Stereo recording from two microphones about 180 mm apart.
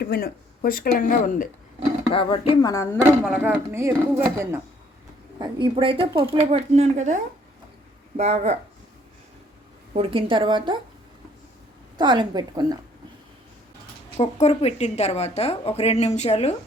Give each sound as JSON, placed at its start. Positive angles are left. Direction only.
{"t": 0.0, "sound": "speech", "side_deg": 60}
{"t": 2.1, "sound": "speech", "side_deg": 30}
{"t": 3.0, "sound": "speech", "side_deg": -10}
{"t": 5.4, "sound": "speech", "side_deg": -25}
{"t": 9.9, "sound": "a woman's voice", "side_deg": -30}
{"t": 11.9, "sound": "a woman's voice", "side_deg": -25}
{"t": 14.2, "sound": "a woman's voice", "side_deg": 35}